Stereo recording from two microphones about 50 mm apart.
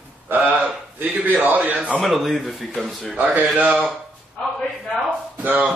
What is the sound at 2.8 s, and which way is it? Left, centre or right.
Speech, centre.